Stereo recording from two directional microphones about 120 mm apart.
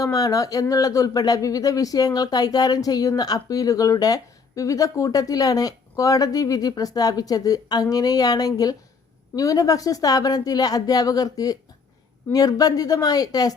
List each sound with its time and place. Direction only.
0.0 s speech: 30° left (ahead or behind)